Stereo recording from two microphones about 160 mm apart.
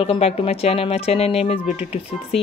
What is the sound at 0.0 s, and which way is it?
Speech, 35° left (ahead or behind).